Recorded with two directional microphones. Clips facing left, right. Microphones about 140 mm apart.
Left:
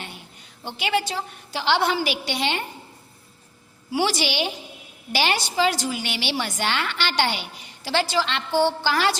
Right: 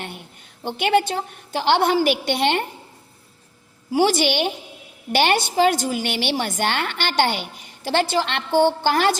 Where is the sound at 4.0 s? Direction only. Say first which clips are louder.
Right 5 dB; 50° right (ahead or behind).